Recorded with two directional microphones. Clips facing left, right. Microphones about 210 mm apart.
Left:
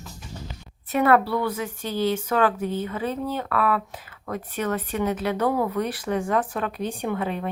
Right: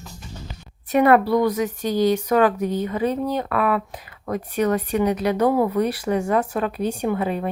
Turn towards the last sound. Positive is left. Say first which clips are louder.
# right 4 dB
turn(degrees=-10)  # may be behind; listen again after turning